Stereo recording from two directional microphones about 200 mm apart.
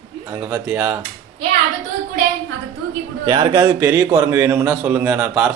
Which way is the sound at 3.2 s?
20° right (ahead or behind).